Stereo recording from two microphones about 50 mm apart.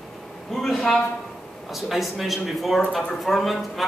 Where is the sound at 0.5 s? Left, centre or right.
Centre.